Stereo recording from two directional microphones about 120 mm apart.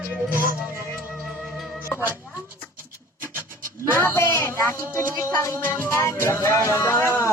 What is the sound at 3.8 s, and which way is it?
Music, 20° left (ahead or behind).